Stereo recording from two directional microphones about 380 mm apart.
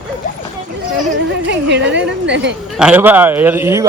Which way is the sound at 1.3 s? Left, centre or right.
Right.